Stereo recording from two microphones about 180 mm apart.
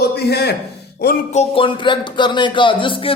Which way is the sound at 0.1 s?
65° left (ahead or behind).